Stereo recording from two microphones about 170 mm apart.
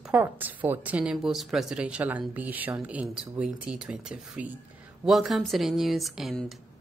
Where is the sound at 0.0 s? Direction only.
10° right (ahead or behind).